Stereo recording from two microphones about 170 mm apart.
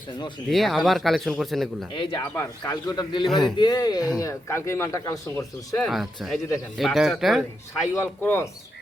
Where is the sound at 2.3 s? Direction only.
15° left (ahead or behind).